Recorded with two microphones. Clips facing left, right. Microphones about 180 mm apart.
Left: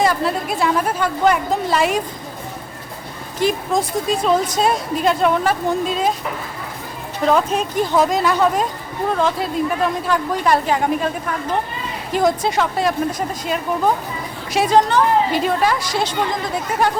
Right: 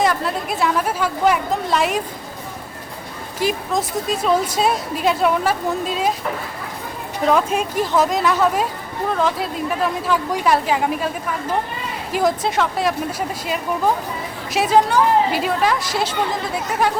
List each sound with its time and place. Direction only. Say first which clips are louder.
0.0 s a woman's voice: left 2 dB; centre (ahead or behind)
3.4 s a woman's voice: left 2 dB; centre (ahead or behind)
7.3 s a woman's voice: left 1 dB; 5° right (ahead or behind)